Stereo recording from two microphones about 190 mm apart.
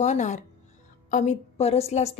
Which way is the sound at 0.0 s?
35° left (ahead or behind).